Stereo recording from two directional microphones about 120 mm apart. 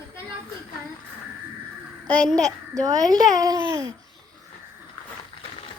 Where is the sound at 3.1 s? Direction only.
30° right (ahead or behind).